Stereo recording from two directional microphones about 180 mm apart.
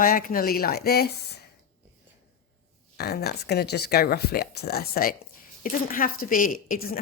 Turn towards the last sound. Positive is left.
turn(degrees=55)  # may be behind; listen again after turning